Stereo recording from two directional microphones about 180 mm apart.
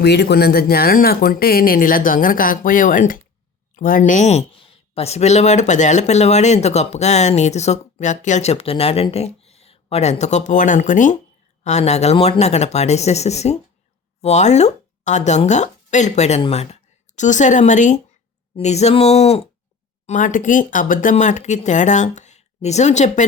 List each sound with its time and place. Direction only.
0.0 s speech: 65° left (ahead or behind); by 19.4 s 35° left (ahead or behind)
20.1 s speech: 45° left (ahead or behind)